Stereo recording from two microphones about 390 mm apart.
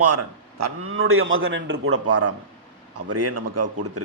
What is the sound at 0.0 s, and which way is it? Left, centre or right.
A man's voice, right.